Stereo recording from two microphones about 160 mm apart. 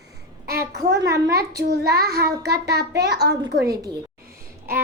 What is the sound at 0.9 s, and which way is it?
Speech, 20° right (ahead or behind).